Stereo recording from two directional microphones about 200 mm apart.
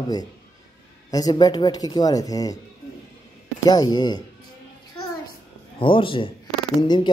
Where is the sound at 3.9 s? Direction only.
20° left (ahead or behind).